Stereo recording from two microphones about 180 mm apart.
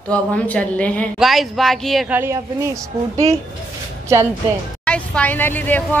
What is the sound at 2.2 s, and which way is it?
A woman's voice, 15° right (ahead or behind).